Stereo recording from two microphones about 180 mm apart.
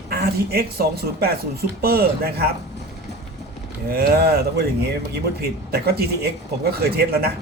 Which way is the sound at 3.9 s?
60° right (ahead or behind).